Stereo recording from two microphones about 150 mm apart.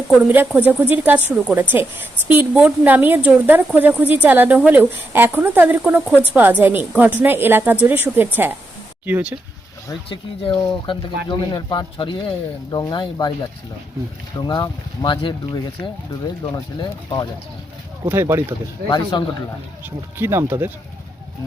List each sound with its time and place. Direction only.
0.6 s a woman's voice: 10° right (ahead or behind)
10.8 s speech: 30° left (ahead or behind)
14.3 s speech: 25° left (ahead or behind)
18.1 s a woman's voice: 15° right (ahead or behind)
18.9 s speech: 30° left (ahead or behind)
19.8 s a woman's voice: 15° right (ahead or behind)